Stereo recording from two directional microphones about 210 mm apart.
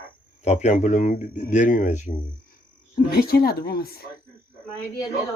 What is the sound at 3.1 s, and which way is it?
Speech, 45° left (ahead or behind).